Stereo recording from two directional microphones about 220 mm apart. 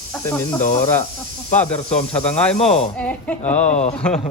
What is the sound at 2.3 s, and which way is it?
Speech, 5° left (ahead or behind).